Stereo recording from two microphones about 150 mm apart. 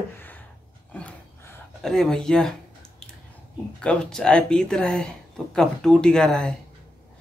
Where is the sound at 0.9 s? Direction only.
10° left (ahead or behind).